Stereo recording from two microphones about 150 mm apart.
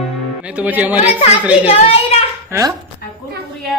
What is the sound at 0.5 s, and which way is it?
Speech, 10° right (ahead or behind).